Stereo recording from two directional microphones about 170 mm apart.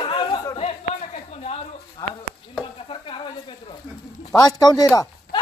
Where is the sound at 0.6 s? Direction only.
40° left (ahead or behind).